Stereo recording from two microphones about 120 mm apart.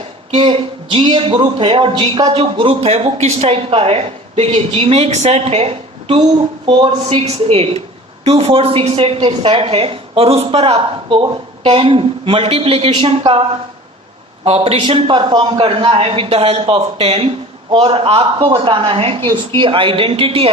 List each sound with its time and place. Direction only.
0.3 s a woman's voice: 45° right (ahead or behind)
2.3 s a woman's voice: 50° right (ahead or behind)
14.4 s a woman's voice: 55° right (ahead or behind)
14.8 s a woman's voice: 45° right (ahead or behind)